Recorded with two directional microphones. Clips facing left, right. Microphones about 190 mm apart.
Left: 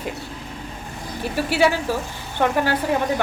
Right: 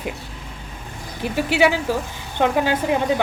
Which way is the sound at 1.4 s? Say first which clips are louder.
Right 1 dB; 15° right (ahead or behind).